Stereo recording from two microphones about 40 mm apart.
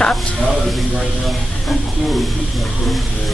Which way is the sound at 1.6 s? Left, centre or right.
Centre.